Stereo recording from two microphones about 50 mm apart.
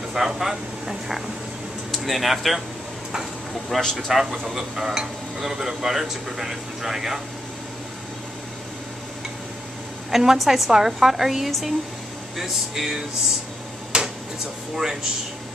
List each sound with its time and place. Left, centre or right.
0.1 s speech: centre
3.6 s speech: centre
3.9 s speech: centre
10.1 s a woman's voice: centre
13.9 s a sound: centre